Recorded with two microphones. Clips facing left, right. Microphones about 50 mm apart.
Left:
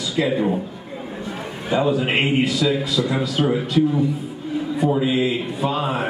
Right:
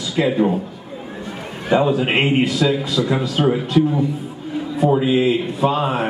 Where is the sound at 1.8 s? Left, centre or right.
Centre.